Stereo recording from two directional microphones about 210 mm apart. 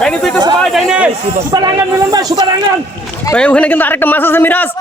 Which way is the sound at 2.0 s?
20° right (ahead or behind).